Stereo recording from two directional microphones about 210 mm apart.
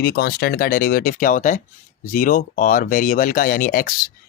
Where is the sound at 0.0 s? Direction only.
50° left (ahead or behind).